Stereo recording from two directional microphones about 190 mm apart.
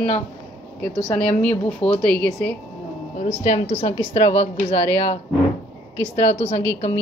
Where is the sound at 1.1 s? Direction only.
5° left (ahead or behind).